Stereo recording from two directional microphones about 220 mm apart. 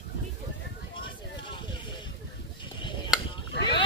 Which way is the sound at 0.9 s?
20° left (ahead or behind).